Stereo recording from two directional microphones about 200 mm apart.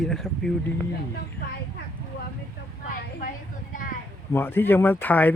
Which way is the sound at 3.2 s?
45° left (ahead or behind).